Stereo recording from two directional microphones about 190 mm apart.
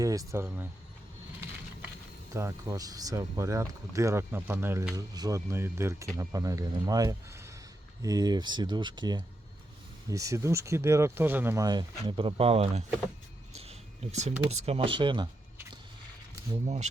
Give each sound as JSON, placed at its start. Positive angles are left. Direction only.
{"t": 0.0, "sound": "speech", "side_deg": -20}
{"t": 2.3, "sound": "speech", "side_deg": -15}
{"t": 13.5, "sound": "a sound", "side_deg": -35}
{"t": 14.5, "sound": "speech", "side_deg": -35}